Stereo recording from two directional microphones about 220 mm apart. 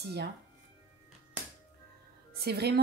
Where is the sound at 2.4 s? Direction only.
45° right (ahead or behind).